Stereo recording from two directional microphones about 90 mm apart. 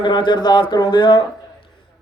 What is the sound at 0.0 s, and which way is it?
A man's voice, 60° left (ahead or behind).